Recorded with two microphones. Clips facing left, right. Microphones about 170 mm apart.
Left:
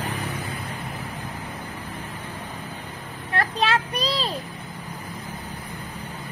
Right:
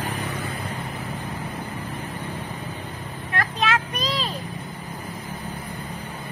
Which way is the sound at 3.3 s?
35° left (ahead or behind).